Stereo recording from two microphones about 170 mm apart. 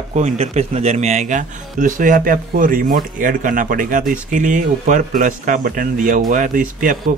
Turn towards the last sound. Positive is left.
turn(degrees=-50)  # may be behind; listen again after turning